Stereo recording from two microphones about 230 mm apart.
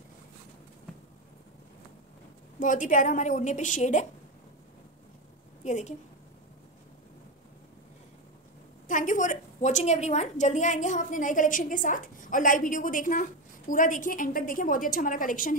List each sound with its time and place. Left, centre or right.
2.6 s a woman's voice: left
5.6 s a woman's voice: left
8.8 s a woman's voice: left